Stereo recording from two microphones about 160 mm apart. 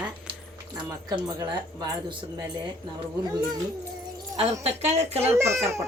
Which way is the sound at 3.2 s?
25° right (ahead or behind).